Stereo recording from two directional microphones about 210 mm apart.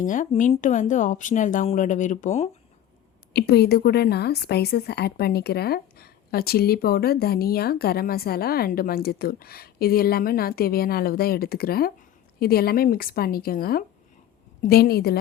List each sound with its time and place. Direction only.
0.0 s speech: 40° left (ahead or behind)
3.3 s speech: 50° left (ahead or behind)